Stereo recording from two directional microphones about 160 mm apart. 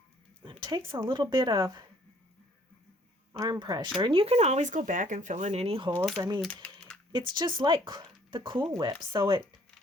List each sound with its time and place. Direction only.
0.4 s a sound: 30° right (ahead or behind)
0.9 s speech: 30° right (ahead or behind)
3.3 s speech: 25° right (ahead or behind)
5.9 s speech: 10° left (ahead or behind)
6.4 s typing: 5° left (ahead or behind)
7.1 s speech: 30° right (ahead or behind)